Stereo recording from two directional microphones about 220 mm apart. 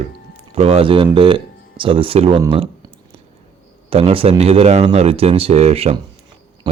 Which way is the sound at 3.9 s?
25° right (ahead or behind).